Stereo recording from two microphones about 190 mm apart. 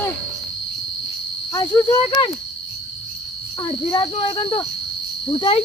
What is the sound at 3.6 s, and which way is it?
Speech, 25° left (ahead or behind).